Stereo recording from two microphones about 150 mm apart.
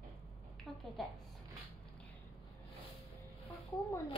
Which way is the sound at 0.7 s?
Centre (ahead or behind).